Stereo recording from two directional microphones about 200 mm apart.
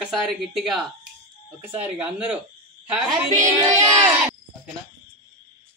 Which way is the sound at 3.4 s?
15° right (ahead or behind).